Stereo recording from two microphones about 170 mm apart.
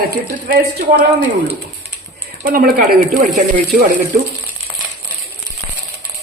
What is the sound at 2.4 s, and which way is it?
Speech, 55° right (ahead or behind).